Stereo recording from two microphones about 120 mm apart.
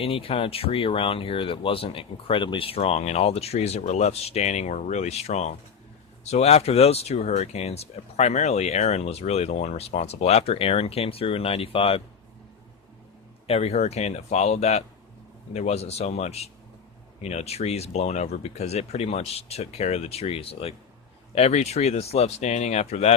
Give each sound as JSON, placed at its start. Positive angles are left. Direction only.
{"t": 0.0, "sound": "speech", "side_deg": 50}
{"t": 13.5, "sound": "speech", "side_deg": 60}